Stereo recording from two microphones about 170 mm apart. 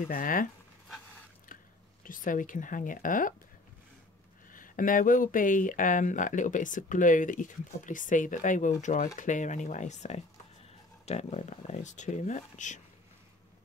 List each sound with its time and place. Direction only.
0.1 s speech: 55° left (ahead or behind)
2.0 s speech: 50° left (ahead or behind)
4.5 s speech: 50° left (ahead or behind)